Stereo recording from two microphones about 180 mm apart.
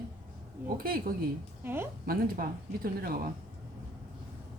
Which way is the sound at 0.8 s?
55° right (ahead or behind).